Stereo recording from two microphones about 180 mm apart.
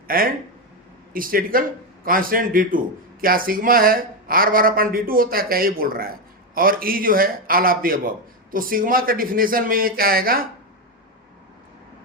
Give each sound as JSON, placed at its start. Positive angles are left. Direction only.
{"t": 0.1, "sound": "a man's voice", "side_deg": -55}